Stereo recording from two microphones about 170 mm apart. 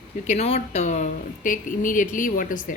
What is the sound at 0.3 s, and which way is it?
Speech, 40° left (ahead or behind).